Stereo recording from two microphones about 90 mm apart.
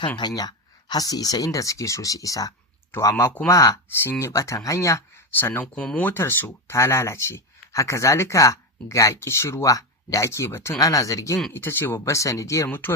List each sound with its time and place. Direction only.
0.2 s speech: 50° left (ahead or behind)
4.0 s speech: 25° left (ahead or behind)
5.3 s speech: 20° left (ahead or behind)
11.5 s speech: 25° left (ahead or behind)